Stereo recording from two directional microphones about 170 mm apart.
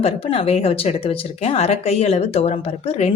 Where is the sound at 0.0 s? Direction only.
35° left (ahead or behind).